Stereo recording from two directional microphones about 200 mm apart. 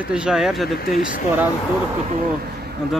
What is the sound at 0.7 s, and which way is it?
Speech, 45° left (ahead or behind).